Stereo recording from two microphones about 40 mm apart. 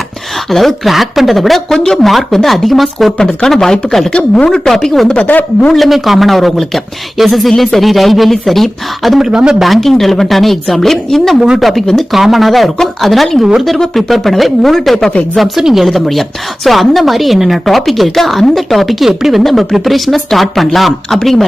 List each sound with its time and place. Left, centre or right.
0.5 s a woman's voice: centre
3.2 s speech: centre
5.2 s a man's voice: left
5.7 s a woman's voice: centre
9.1 s speech: centre
9.6 s a woman's voice: centre
14.1 s a woman's voice: centre